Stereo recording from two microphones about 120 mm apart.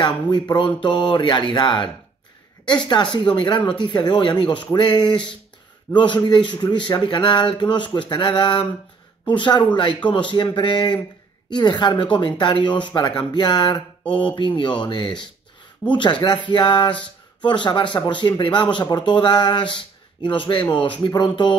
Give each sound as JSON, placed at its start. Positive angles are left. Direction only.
{"t": 0.0, "sound": "speech", "side_deg": 40}
{"t": 5.9, "sound": "a man's voice", "side_deg": 25}
{"t": 6.2, "sound": "speech", "side_deg": 40}
{"t": 20.6, "sound": "speech", "side_deg": 10}
{"t": 21.0, "sound": "speech", "side_deg": 40}